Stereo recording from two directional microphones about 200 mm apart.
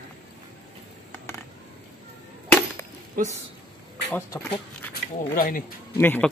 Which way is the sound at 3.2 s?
45° right (ahead or behind).